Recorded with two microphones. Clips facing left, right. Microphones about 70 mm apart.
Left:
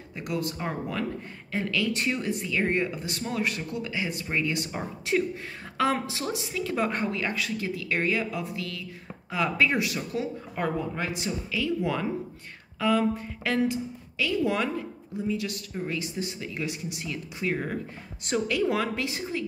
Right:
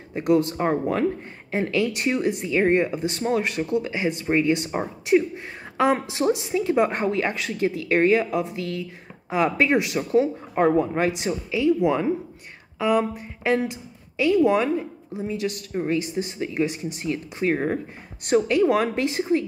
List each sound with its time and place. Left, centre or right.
0.1 s a woman's voice: right
18.6 s speech: right